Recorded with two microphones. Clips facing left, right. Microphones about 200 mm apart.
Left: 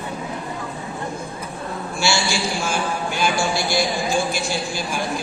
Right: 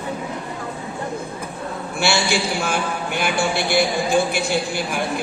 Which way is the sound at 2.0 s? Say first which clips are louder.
Right 2 dB; 60° right (ahead or behind).